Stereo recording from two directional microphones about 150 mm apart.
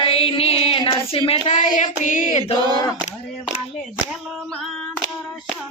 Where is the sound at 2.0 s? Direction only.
55° left (ahead or behind).